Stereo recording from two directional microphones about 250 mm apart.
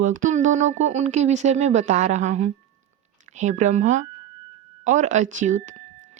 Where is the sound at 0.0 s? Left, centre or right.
Right.